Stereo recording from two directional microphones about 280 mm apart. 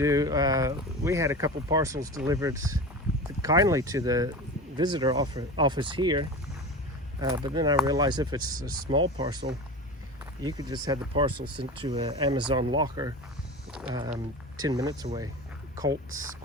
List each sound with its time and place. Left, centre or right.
0.0 s speech: centre
8.4 s speech: right
8.7 s speech: centre
10.4 s speech: centre
13.7 s a sound: centre
14.6 s speech: centre